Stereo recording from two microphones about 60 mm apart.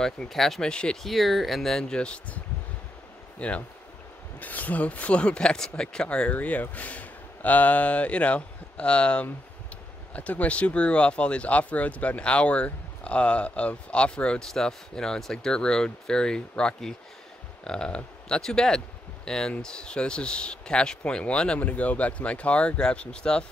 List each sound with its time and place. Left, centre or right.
0.0 s speech: centre
1.0 s speech: centre
14.5 s speech: centre